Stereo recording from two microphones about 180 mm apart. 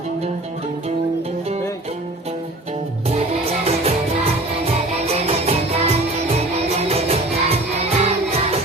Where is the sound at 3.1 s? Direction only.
35° right (ahead or behind).